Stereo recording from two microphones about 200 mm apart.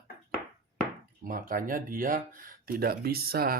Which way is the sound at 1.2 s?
45° right (ahead or behind).